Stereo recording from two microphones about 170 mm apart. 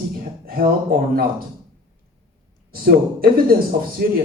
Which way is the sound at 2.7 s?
60° right (ahead or behind).